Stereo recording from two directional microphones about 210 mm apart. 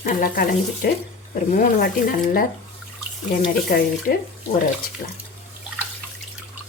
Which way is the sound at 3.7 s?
45° left (ahead or behind).